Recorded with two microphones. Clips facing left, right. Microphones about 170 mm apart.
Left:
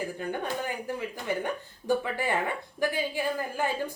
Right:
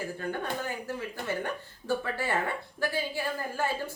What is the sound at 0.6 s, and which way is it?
Speech, 15° left (ahead or behind).